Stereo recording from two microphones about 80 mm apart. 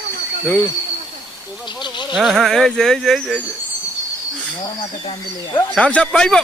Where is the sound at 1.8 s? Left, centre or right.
Left.